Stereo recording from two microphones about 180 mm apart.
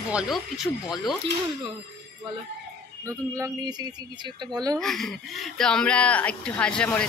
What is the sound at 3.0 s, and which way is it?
Speech, 15° right (ahead or behind).